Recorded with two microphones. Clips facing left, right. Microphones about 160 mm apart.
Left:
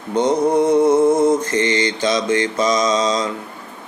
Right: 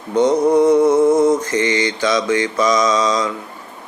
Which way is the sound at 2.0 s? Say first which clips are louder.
Right 1 dB; 25° left (ahead or behind).